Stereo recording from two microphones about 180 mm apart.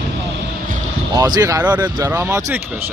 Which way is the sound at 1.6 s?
10° right (ahead or behind).